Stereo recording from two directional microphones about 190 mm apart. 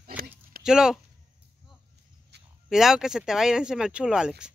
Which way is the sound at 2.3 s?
60° right (ahead or behind).